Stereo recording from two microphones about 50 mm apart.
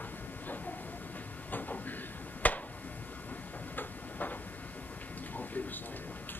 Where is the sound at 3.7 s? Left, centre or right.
Left.